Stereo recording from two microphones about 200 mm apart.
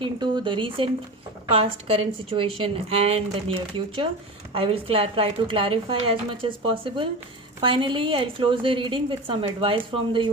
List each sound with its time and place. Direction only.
0.0 s a woman's voice: 25° right (ahead or behind)